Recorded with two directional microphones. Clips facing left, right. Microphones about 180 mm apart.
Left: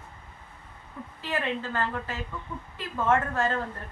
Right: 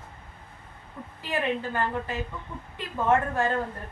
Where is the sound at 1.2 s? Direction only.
15° right (ahead or behind).